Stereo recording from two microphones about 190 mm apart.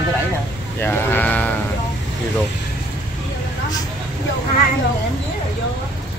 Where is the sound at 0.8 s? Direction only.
10° left (ahead or behind).